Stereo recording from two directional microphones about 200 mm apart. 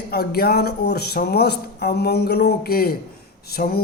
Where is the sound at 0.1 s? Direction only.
50° left (ahead or behind).